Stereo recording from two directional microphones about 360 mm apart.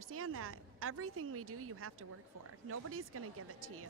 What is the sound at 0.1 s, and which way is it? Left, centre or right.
Speech, right.